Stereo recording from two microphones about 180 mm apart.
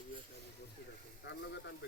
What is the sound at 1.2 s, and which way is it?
Speech, 75° left (ahead or behind).